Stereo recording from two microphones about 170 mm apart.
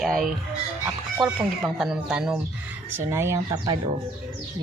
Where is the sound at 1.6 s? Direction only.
Centre (ahead or behind).